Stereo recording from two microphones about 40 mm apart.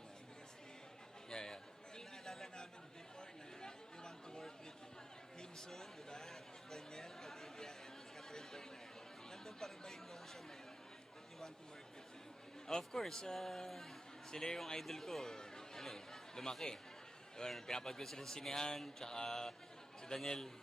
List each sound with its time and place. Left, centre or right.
1.3 s a sound: centre
2.0 s chatter: centre
5.4 s a sound: centre
6.1 s chatter: centre
9.3 s speech: centre
12.6 s a man's voice: centre